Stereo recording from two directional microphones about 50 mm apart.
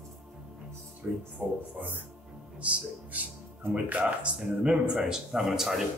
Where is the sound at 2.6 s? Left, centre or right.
Right.